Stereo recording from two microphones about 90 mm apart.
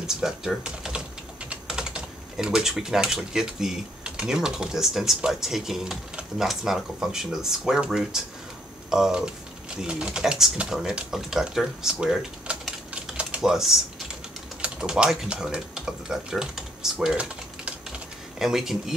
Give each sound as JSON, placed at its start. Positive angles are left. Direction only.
{"t": 0.0, "sound": "speech", "side_deg": -5}